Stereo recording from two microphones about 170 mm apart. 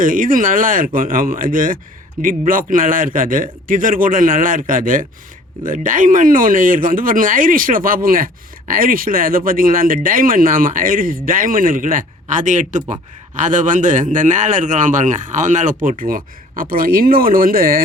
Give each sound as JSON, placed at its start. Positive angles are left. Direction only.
{"t": 0.0, "sound": "speech", "side_deg": -55}